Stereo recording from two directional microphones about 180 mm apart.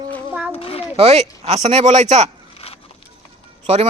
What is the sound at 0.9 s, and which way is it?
Speech, 35° right (ahead or behind).